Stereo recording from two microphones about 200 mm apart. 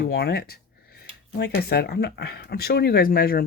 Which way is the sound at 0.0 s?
55° left (ahead or behind).